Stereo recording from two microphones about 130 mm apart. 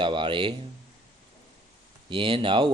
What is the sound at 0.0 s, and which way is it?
Speech, 40° right (ahead or behind).